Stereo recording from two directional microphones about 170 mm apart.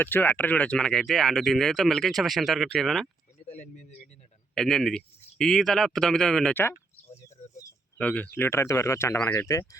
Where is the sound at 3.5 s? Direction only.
40° left (ahead or behind).